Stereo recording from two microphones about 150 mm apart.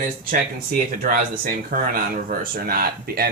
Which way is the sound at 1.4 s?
75° right (ahead or behind).